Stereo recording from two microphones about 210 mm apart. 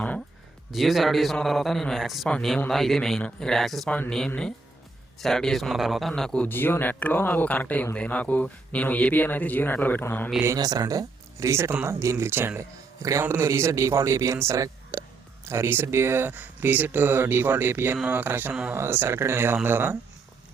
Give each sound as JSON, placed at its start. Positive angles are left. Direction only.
{"t": 0.7, "sound": "a man's voice", "side_deg": 0}
{"t": 10.4, "sound": "speech", "side_deg": -15}